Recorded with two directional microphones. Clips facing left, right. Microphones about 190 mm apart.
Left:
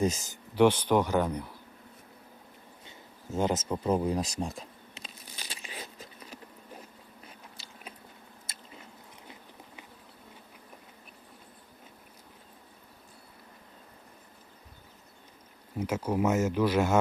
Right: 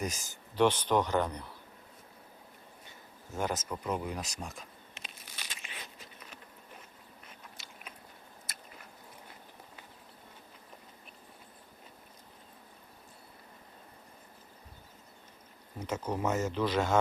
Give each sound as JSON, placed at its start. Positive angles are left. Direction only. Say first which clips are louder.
{"t": 0.0, "sound": "speech", "louder": "left 9 dB", "side_deg": 25}
{"t": 0.5, "sound": "speech", "louder": "left 4 dB", "side_deg": 10}
{"t": 3.3, "sound": "speech", "louder": "left 6 dB", "side_deg": 20}
{"t": 5.0, "sound": "a sound", "louder": "left 3 dB", "side_deg": 35}
{"t": 7.5, "sound": "biting", "louder": "left 3 dB", "side_deg": 30}
{"t": 8.5, "sound": "chewing", "louder": "right 1 dB", "side_deg": 25}
{"t": 15.8, "sound": "speech", "louder": "left 5 dB", "side_deg": 10}